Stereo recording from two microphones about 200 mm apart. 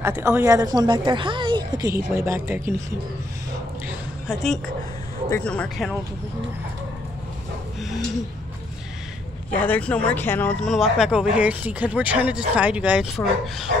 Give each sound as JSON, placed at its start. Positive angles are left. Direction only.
{"t": 0.0, "sound": "a woman's voice", "side_deg": -10}
{"t": 3.8, "sound": "a sound", "side_deg": 0}
{"t": 5.3, "sound": "speech", "side_deg": 5}
{"t": 9.5, "sound": "speech", "side_deg": 5}